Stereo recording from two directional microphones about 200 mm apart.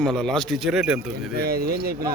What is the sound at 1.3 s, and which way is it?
Speech, 50° right (ahead or behind).